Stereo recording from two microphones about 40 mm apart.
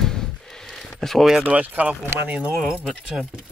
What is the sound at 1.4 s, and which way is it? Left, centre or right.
Speech, right.